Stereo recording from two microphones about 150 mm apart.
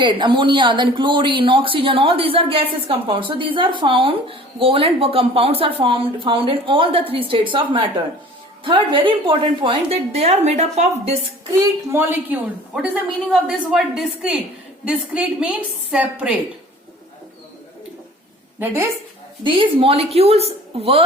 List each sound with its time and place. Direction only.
0.0 s speech: 35° right (ahead or behind); by 11.1 s 50° right (ahead or behind)
11.9 s a woman's voice: 15° right (ahead or behind)
18.6 s a woman's voice: 15° right (ahead or behind)
19.5 s speech: 35° right (ahead or behind)